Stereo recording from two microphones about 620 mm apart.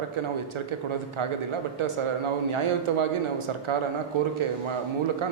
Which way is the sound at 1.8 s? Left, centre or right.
Right.